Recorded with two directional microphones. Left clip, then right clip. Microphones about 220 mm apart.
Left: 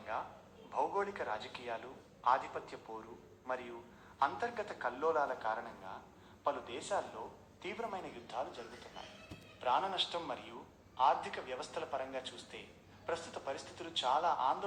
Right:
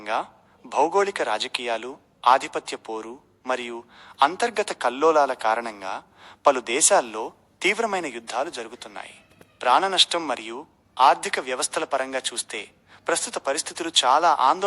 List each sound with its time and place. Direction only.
0.7 s a man's voice: 50° right (ahead or behind)